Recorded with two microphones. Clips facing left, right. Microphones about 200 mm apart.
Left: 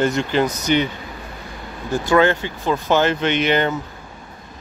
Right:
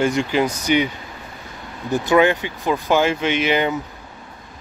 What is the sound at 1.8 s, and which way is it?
Speech, 20° right (ahead or behind).